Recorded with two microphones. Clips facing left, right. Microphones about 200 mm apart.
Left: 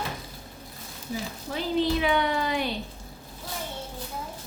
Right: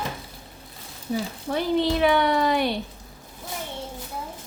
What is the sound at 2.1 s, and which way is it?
Speech, 65° right (ahead or behind).